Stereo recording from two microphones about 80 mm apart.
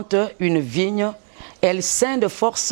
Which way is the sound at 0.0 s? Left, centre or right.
Centre.